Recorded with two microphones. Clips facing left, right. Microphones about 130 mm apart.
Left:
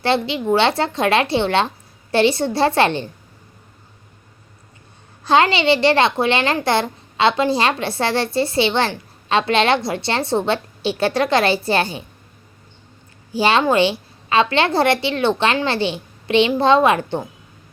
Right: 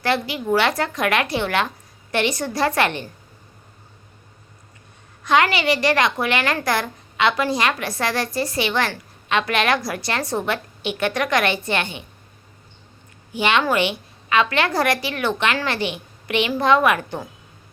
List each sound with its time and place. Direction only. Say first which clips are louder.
0.0 s a woman's voice: left 3 dB; 25° left (ahead or behind)
5.2 s a woman's voice: left 3 dB; 30° left (ahead or behind)
13.3 s a woman's voice: left 4 dB; 35° left (ahead or behind)